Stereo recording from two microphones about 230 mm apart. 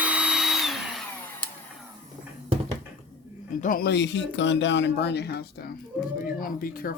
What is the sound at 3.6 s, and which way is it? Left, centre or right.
Speech, left.